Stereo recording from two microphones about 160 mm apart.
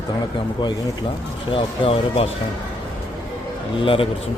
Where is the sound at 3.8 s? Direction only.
35° left (ahead or behind).